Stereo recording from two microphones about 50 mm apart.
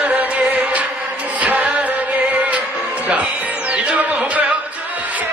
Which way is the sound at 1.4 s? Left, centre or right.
Right.